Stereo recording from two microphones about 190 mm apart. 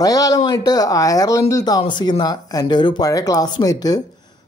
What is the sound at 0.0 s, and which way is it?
Speech, 20° left (ahead or behind).